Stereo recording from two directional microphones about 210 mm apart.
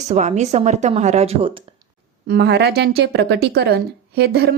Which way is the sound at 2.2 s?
50° right (ahead or behind).